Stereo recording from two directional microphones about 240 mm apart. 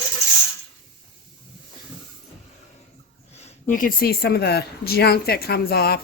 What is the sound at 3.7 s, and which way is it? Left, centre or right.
Speech, left.